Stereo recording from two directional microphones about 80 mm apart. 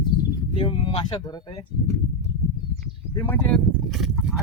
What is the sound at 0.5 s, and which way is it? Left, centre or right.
Speech, left.